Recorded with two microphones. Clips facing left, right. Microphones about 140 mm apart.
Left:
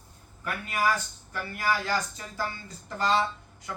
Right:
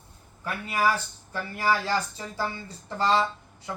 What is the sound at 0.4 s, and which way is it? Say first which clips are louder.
Speech: right 2 dB; 30° right (ahead or behind).